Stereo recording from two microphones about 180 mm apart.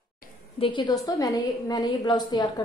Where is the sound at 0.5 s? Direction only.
30° left (ahead or behind).